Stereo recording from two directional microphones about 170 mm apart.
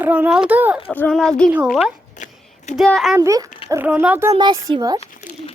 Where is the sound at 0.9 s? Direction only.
10° left (ahead or behind).